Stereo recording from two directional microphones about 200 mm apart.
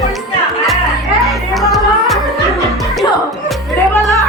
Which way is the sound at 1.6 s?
Centre (ahead or behind).